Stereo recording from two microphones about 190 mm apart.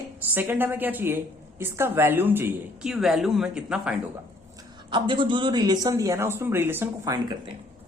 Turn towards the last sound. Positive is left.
turn(degrees=-20)  # may be behind; listen again after turning